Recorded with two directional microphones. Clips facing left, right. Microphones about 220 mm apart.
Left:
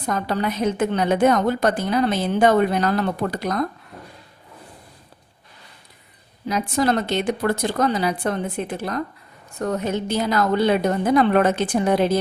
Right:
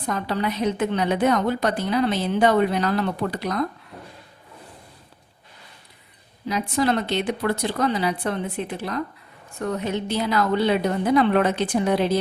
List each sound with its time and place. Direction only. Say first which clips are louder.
0.0 s a woman's voice: left 2 dB; 45° left (ahead or behind)
6.5 s a woman's voice: left 1 dB; 45° left (ahead or behind)